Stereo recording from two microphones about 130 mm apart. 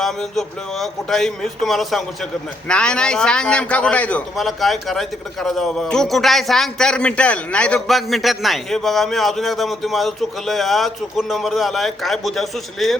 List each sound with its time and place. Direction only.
0.0 s a man's voice: centre (ahead or behind)